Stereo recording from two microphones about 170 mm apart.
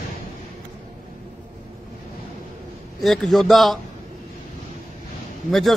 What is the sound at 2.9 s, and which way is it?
Speech, centre (ahead or behind).